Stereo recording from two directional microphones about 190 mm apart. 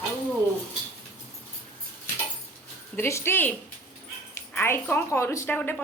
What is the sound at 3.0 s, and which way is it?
A woman's voice, 15° left (ahead or behind).